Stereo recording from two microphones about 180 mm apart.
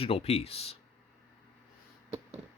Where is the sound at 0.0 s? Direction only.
35° left (ahead or behind).